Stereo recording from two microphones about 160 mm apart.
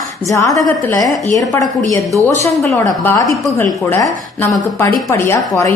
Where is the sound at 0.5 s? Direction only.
5° left (ahead or behind).